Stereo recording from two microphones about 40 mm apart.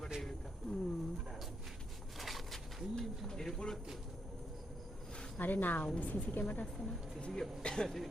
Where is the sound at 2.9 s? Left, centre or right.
Centre.